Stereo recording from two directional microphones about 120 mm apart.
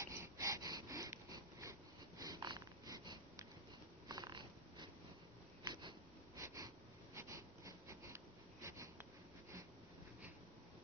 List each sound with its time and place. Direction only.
0.0 s wheeze: 25° right (ahead or behind)
4.1 s purr: 35° right (ahead or behind)
5.6 s cat: 35° right (ahead or behind)
6.3 s snort: 25° right (ahead or behind)